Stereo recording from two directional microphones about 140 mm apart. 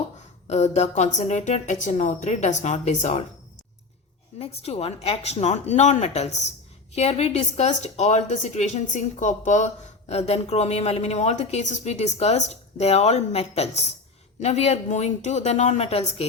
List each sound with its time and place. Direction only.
0.4 s a woman's voice: 50° left (ahead or behind)
4.4 s a woman's voice: 45° left (ahead or behind)